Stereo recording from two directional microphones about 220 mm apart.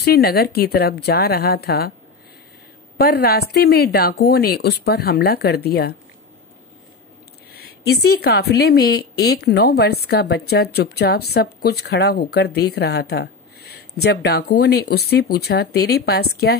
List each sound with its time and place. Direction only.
0.0 s a woman's voice: 45° left (ahead or behind)
3.0 s a woman's voice: 45° left (ahead or behind)
7.5 s a woman's voice: 45° left (ahead or behind)